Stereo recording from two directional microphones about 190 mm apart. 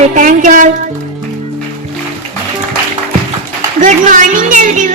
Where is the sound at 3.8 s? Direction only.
40° right (ahead or behind).